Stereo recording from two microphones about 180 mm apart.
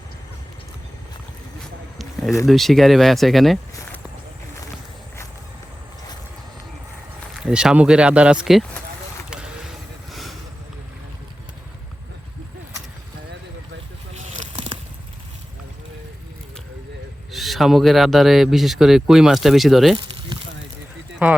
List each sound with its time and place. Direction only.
2.5 s speech: centre (ahead or behind)
7.3 s speech: 5° right (ahead or behind)
10.1 s vehicle: centre (ahead or behind)
14.1 s a sound: 35° right (ahead or behind)
17.3 s speech: centre (ahead or behind)
21.2 s speech: 10° right (ahead or behind)